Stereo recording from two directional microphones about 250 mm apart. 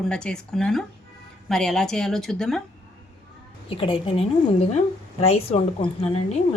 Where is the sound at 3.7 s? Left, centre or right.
Left.